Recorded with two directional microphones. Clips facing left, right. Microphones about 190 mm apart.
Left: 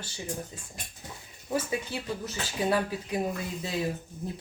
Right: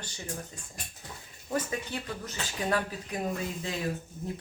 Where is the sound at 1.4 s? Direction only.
5° left (ahead or behind).